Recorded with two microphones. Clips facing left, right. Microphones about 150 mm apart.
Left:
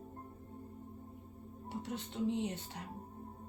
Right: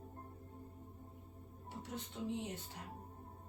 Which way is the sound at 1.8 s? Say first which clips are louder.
Left 6 dB; 75° left (ahead or behind).